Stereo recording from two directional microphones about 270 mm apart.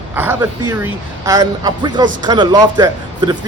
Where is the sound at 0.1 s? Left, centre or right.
Centre.